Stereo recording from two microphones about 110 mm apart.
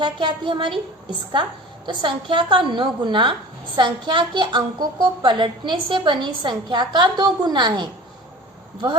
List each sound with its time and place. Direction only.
0.0 s a woman's voice: 45° right (ahead or behind)
1.9 s a woman's voice: 45° right (ahead or behind)